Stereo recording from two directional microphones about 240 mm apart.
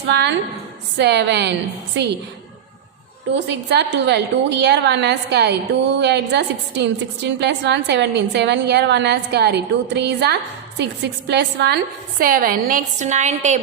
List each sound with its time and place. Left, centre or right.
0.1 s a woman's voice: right
3.3 s a woman's voice: right